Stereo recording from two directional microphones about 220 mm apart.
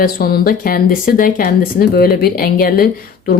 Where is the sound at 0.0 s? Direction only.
45° left (ahead or behind).